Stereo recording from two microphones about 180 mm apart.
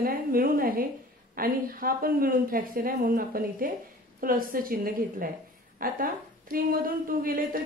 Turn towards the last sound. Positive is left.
turn(degrees=-50)  # may be behind; listen again after turning